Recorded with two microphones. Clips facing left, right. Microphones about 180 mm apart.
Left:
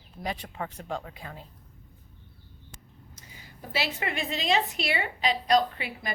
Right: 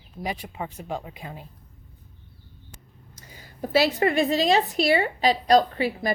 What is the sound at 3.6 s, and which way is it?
A woman's voice, 40° right (ahead or behind).